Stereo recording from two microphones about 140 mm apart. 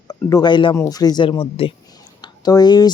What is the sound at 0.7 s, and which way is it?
Speech, 25° left (ahead or behind).